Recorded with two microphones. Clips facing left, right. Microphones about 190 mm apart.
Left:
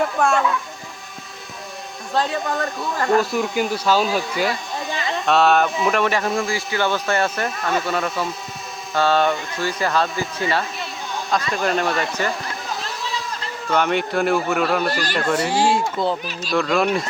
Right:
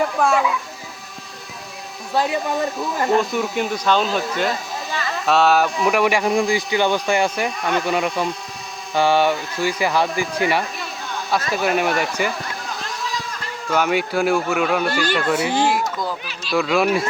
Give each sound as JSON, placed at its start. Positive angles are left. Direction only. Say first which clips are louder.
{"t": 0.0, "sound": "speech", "louder": "right 1 dB", "side_deg": 0}
{"t": 2.1, "sound": "speech", "louder": "right 2 dB", "side_deg": -15}
{"t": 3.2, "sound": "speech", "louder": "even", "side_deg": 0}
{"t": 5.9, "sound": "speech", "louder": "right 2 dB", "side_deg": -10}
{"t": 12.8, "sound": "a sound", "louder": "right 1 dB", "side_deg": 0}
{"t": 13.7, "sound": "speech", "louder": "even", "side_deg": -5}
{"t": 15.6, "sound": "speech", "louder": "left 2 dB", "side_deg": 25}
{"t": 16.5, "sound": "speech", "louder": "right 1 dB", "side_deg": -5}